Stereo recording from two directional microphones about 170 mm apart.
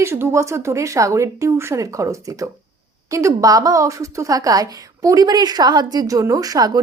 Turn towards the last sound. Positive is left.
turn(degrees=-20)  # may be behind; listen again after turning